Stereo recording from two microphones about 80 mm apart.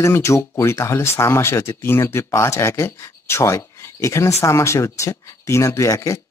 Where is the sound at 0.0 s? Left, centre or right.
Left.